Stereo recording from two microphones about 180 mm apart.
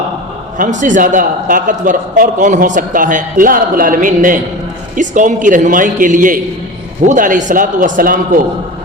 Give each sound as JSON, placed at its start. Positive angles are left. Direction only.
{"t": 0.6, "sound": "a man's voice", "side_deg": -45}